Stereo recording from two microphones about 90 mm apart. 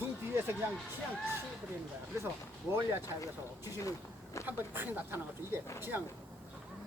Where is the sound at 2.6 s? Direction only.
25° right (ahead or behind).